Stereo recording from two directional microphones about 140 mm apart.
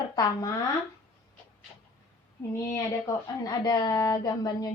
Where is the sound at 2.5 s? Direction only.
20° left (ahead or behind).